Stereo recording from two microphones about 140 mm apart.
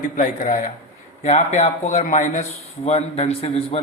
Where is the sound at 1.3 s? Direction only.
55° left (ahead or behind).